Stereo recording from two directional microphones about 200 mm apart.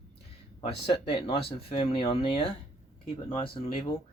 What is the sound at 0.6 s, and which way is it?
Speech, 30° left (ahead or behind).